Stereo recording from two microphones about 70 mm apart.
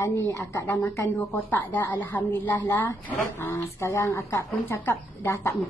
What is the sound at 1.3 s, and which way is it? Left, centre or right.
A woman's voice, left.